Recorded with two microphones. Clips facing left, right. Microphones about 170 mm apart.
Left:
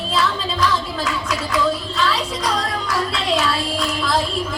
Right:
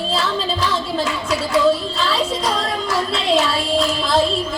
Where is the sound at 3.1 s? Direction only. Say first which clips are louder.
Right 4 dB; 25° right (ahead or behind).